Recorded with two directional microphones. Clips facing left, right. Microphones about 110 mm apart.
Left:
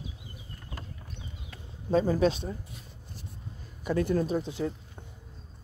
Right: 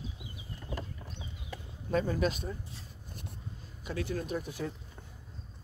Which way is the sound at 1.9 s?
30° left (ahead or behind).